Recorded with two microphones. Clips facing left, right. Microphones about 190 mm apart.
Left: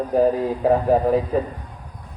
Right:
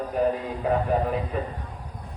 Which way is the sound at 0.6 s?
35° left (ahead or behind).